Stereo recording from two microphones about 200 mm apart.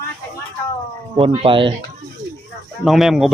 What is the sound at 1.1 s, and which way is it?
Speech, 25° right (ahead or behind).